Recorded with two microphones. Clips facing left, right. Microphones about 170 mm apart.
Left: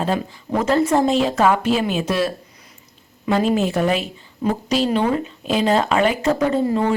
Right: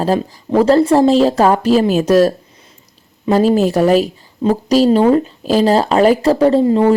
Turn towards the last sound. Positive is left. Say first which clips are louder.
# right 7 dB
turn(degrees=-25)  # may be behind; listen again after turning